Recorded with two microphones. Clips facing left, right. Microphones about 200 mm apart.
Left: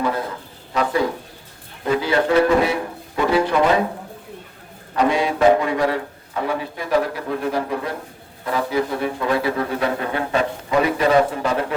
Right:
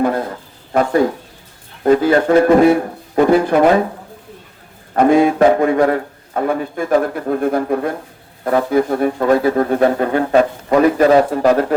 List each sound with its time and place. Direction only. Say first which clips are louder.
0.7 s a sound: right 6 dB; 50° right (ahead or behind)
1.8 s speech: right 7 dB; 50° right (ahead or behind)
4.9 s a man's voice: right 7 dB; 50° right (ahead or behind)